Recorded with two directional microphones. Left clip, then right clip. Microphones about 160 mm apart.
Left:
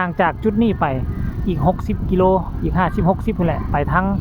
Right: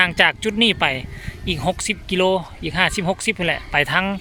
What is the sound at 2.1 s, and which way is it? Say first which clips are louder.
Speech: left 3 dB; 25° right (ahead or behind).